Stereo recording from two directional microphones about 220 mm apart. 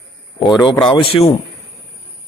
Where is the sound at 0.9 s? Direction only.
25° left (ahead or behind).